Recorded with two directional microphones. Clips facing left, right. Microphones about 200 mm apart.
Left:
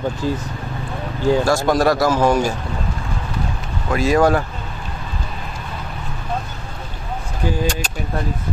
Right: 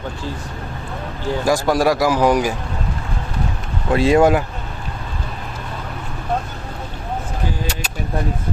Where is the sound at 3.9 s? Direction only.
25° right (ahead or behind).